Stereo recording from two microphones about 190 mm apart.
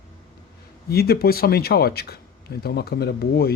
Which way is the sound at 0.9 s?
55° left (ahead or behind).